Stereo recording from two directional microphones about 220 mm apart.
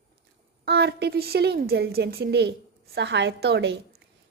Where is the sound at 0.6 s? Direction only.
50° right (ahead or behind).